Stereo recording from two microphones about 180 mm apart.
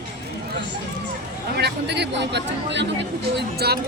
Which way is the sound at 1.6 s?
70° right (ahead or behind).